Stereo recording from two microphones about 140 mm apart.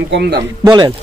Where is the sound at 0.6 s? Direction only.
30° right (ahead or behind).